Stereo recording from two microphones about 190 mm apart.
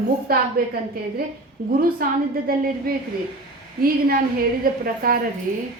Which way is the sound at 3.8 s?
50° right (ahead or behind).